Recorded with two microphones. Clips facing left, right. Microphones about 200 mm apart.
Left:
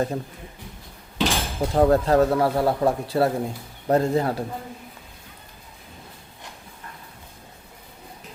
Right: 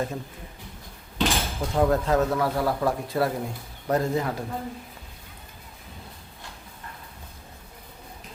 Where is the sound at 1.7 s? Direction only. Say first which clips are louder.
Left 4 dB; 35° left (ahead or behind).